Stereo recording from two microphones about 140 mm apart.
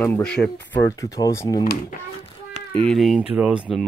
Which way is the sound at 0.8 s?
20° left (ahead or behind).